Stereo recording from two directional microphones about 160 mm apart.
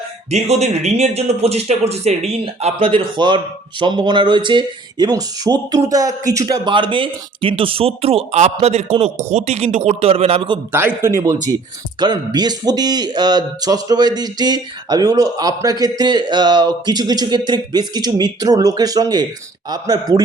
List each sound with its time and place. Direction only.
0.3 s speech: 45° right (ahead or behind)
10.7 s a man's voice: 15° right (ahead or behind)